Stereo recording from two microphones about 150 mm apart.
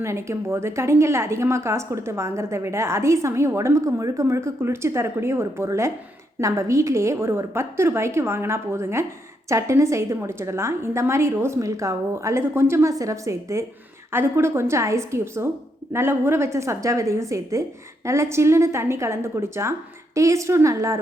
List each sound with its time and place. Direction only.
0.0 s a woman's voice: 20° right (ahead or behind)